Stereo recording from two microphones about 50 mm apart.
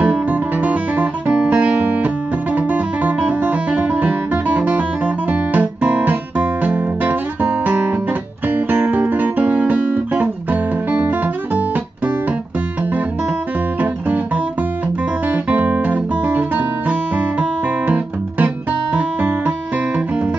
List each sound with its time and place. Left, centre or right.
0.0 s music: right
7.6 s guitar: right
9.6 s music: right
13.7 s music: right
15.2 s guitar: right
16.9 s music: right